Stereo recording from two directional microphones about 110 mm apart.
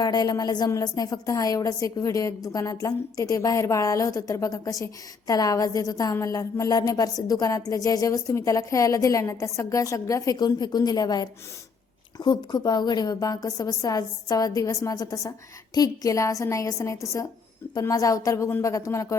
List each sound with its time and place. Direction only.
0.0 s a woman's voice: 35° left (ahead or behind)